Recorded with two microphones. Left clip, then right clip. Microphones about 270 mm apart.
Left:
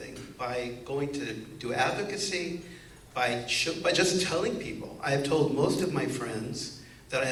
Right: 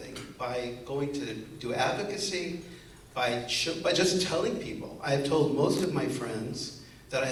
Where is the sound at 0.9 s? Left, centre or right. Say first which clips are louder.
Left 1 dB; right.